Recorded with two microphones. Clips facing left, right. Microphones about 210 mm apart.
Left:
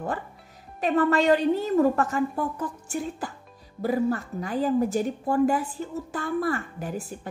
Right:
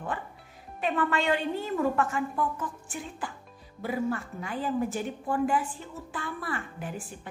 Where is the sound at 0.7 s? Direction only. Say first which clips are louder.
Left 6 dB; 40° left (ahead or behind).